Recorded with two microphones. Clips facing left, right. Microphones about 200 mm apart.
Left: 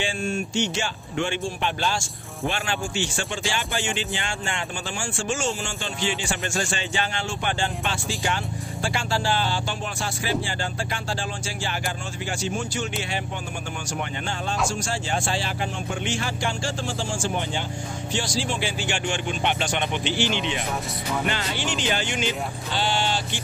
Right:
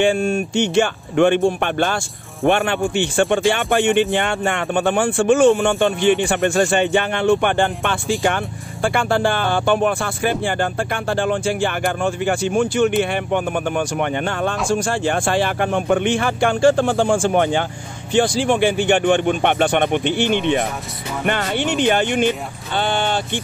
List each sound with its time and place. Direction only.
0.0 s speech: 60° right (ahead or behind)